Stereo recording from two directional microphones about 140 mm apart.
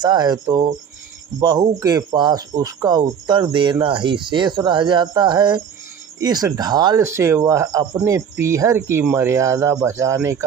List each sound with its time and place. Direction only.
0.0 s speech: 30° right (ahead or behind)